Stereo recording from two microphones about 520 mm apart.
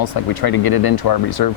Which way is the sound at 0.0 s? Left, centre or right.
Left.